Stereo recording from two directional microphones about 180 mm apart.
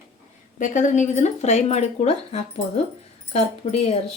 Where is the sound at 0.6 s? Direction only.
45° left (ahead or behind).